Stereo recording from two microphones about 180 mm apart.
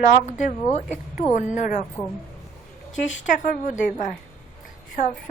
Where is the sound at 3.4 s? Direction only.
45° left (ahead or behind).